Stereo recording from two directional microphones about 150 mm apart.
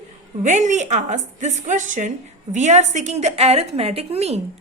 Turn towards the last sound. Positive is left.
turn(degrees=-45)  # may be behind; listen again after turning